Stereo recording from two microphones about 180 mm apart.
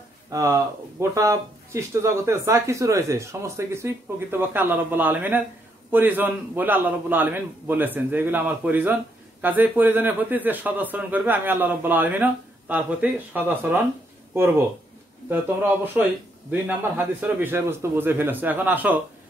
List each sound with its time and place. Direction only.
0.3 s speech: 15° right (ahead or behind)
15.2 s speech: 10° right (ahead or behind)